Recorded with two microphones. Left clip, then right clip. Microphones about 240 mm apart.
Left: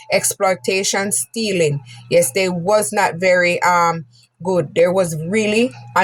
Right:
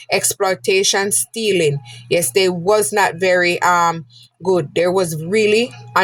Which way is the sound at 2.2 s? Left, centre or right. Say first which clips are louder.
Left 1 dB; right.